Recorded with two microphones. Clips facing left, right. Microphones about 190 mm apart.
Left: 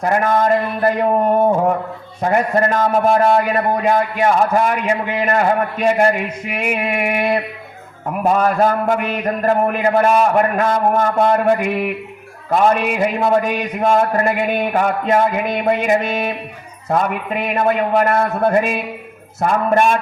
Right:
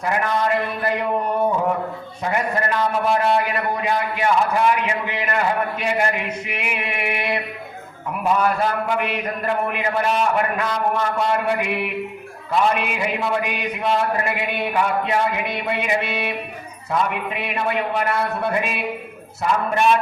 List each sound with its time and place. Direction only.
0.0 s a man's voice: 45° left (ahead or behind)